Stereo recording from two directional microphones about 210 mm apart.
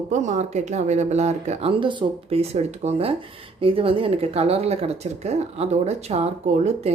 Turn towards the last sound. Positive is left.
turn(degrees=-30)  # may be behind; listen again after turning